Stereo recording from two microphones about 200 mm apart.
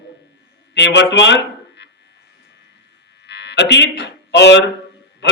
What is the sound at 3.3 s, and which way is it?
Speech, 60° left (ahead or behind).